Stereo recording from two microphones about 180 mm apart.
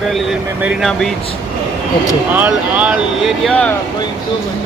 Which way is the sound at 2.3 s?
10° right (ahead or behind).